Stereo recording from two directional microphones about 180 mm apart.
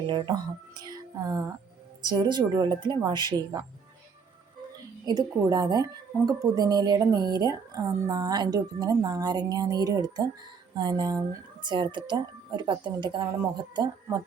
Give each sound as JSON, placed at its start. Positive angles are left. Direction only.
{"t": 0.1, "sound": "speech", "side_deg": -25}
{"t": 5.0, "sound": "speech", "side_deg": -20}